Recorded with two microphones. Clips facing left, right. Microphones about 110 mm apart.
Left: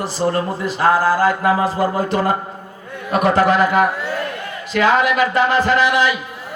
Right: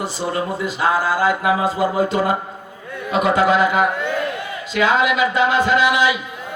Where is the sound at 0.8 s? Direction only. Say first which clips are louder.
Left 3 dB; 40° left (ahead or behind).